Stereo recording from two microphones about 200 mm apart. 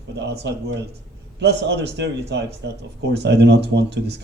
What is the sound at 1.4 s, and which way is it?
A man's voice, 55° right (ahead or behind).